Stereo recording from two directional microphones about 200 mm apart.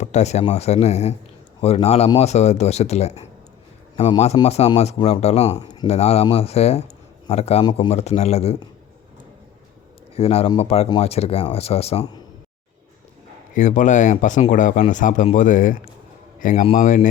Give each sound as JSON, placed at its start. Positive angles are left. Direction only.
{"t": 0.0, "sound": "speech", "side_deg": 35}
{"t": 5.6, "sound": "speech", "side_deg": 20}
{"t": 7.6, "sound": "speech", "side_deg": 20}
{"t": 7.9, "sound": "speech", "side_deg": 35}
{"t": 10.2, "sound": "speech", "side_deg": 30}
{"t": 13.5, "sound": "speech", "side_deg": 40}